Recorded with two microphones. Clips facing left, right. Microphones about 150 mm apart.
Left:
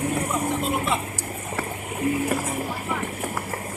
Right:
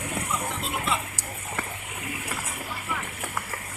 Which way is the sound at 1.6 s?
35° left (ahead or behind).